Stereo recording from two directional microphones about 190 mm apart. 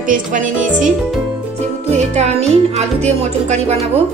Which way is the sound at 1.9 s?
35° right (ahead or behind).